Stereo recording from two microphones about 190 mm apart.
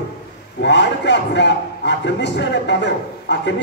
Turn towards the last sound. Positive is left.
turn(degrees=70)  # may be behind; listen again after turning